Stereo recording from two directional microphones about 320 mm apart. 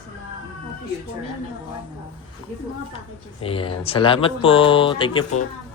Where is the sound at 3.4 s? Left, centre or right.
Centre.